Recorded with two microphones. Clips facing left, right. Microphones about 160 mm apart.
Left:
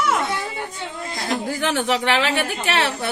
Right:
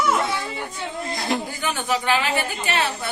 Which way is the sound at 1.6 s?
80° left.